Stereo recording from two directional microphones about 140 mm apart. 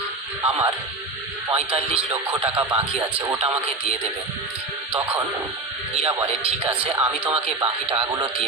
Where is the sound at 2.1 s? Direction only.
15° right (ahead or behind).